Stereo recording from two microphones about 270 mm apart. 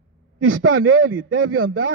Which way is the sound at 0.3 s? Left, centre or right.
Right.